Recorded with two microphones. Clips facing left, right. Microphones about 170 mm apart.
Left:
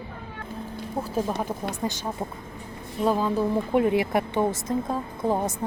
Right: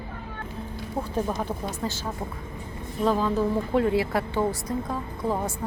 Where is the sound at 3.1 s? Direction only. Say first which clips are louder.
Even; 10° left (ahead or behind).